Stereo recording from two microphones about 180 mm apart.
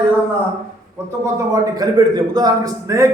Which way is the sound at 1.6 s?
20° right (ahead or behind).